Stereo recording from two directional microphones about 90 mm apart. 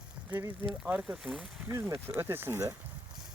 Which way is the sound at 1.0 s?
5° right (ahead or behind).